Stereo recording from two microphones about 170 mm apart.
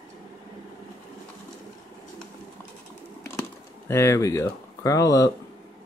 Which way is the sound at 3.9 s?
15° left (ahead or behind).